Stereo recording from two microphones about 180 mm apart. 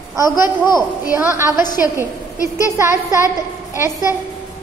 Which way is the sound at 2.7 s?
15° right (ahead or behind).